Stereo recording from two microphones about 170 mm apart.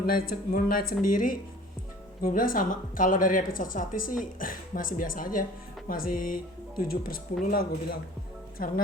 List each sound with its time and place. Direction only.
0.0 s speech: 60° left (ahead or behind)